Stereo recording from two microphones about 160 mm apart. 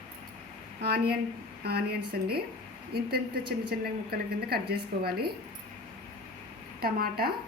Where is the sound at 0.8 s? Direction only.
80° right.